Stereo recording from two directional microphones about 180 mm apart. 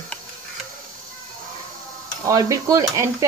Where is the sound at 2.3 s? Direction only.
20° right (ahead or behind).